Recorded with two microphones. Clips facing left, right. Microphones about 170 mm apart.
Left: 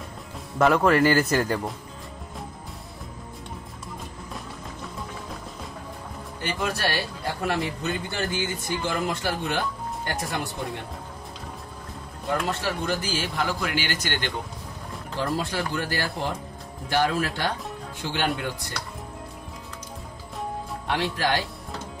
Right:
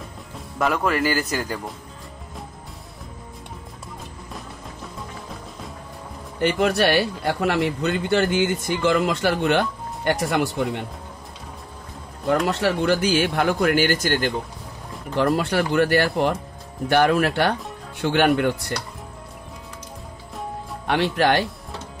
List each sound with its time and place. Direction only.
0.6 s speech: centre (ahead or behind)
6.4 s a man's voice: 65° right (ahead or behind)
12.3 s speech: 75° right (ahead or behind); by 14.3 s 45° right (ahead or behind)
15.1 s a man's voice: 65° right (ahead or behind)
20.8 s speech: 65° right (ahead or behind)